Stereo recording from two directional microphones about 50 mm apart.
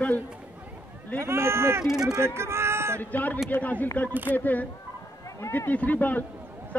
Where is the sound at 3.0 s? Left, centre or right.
Left.